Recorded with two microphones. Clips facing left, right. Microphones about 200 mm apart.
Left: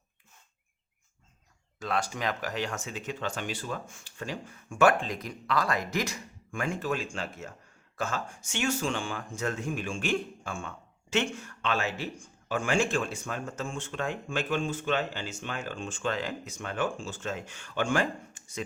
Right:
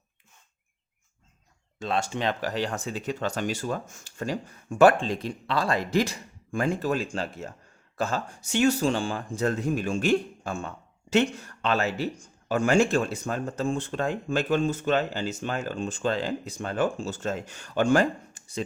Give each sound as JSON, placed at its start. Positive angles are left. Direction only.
{"t": 1.8, "sound": "speech", "side_deg": -25}